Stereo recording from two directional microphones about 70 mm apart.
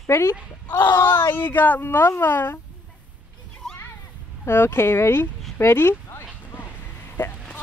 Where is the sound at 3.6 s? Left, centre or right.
Centre.